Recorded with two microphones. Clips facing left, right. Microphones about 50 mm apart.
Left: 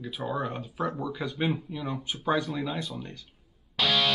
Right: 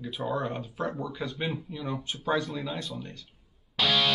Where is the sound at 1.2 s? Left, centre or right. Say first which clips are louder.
Left 4 dB; centre.